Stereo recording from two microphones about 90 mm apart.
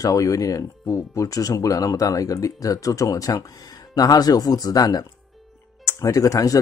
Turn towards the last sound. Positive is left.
turn(degrees=40)  # may be behind; listen again after turning